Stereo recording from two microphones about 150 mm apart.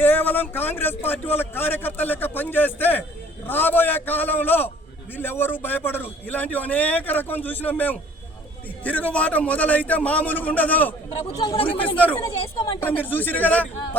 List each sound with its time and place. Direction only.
0.0 s a man's voice: 10° left (ahead or behind)
11.3 s speech: 30° left (ahead or behind)
11.6 s a man's voice: 10° left (ahead or behind)
12.4 s a woman's voice: 35° left (ahead or behind)
12.8 s a man's voice: 10° left (ahead or behind)